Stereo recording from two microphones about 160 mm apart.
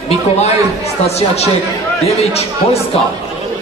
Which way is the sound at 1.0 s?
40° left (ahead or behind).